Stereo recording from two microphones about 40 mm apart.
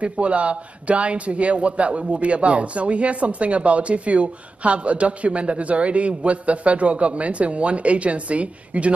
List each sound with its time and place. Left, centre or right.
0.0 s a man's voice: right